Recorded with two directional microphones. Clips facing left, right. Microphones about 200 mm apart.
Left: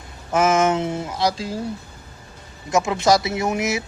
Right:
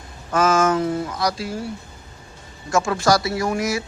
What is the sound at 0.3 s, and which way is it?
A man's voice, 20° left (ahead or behind).